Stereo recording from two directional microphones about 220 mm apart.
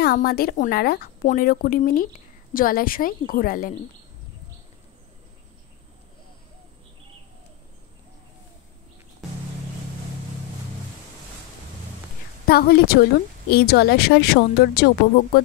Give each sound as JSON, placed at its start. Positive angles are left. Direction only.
{"t": 0.0, "sound": "a woman's voice", "side_deg": 45}
{"t": 12.4, "sound": "speech", "side_deg": 45}